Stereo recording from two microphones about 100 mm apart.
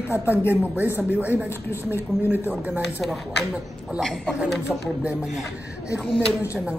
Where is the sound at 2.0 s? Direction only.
20° right (ahead or behind).